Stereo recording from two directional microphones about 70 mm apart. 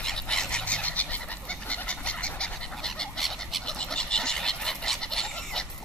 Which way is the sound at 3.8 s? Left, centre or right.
Centre.